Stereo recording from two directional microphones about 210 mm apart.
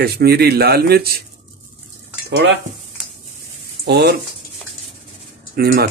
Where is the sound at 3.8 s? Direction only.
55° right (ahead or behind).